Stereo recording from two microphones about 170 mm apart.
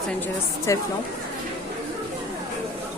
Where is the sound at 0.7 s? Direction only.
20° left (ahead or behind).